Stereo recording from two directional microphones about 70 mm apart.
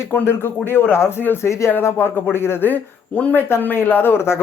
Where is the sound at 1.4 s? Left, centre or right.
Left.